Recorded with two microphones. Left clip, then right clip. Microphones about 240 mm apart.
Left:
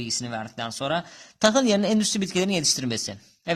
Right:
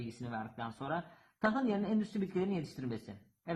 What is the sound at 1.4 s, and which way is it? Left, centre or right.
Speech, left.